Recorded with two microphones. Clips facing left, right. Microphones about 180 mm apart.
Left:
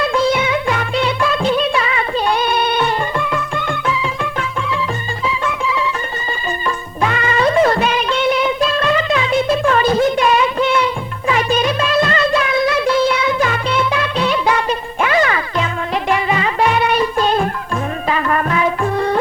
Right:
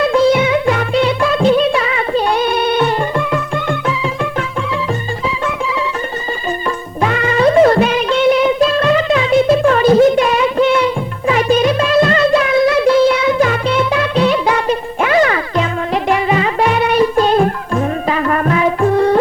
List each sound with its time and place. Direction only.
0.0 s music: 40° right (ahead or behind)
7.0 s music: 40° right (ahead or behind)